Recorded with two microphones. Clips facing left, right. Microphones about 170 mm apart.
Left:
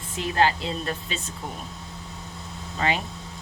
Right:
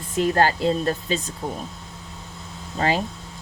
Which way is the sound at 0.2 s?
45° right (ahead or behind).